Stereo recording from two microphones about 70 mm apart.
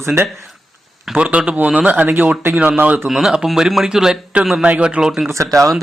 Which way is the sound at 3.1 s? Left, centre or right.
Centre.